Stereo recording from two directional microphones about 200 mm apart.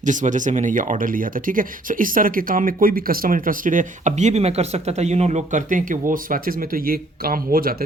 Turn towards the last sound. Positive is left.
turn(degrees=-50)  # may be behind; listen again after turning